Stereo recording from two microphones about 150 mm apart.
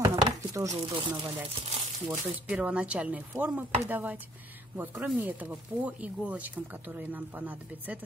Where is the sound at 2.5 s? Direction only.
10° right (ahead or behind).